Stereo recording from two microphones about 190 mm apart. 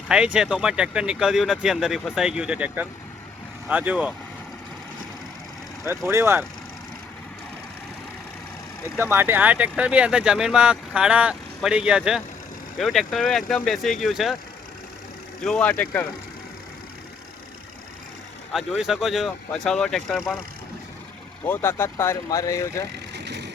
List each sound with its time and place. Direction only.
0.3 s speech: 5° right (ahead or behind)
6.1 s speech: 15° right (ahead or behind)
9.0 s speech: 10° right (ahead or behind)
15.4 s speech: 5° left (ahead or behind)
18.5 s speech: centre (ahead or behind)
21.4 s speech: 10° left (ahead or behind)
23.1 s vehicle: 65° right (ahead or behind)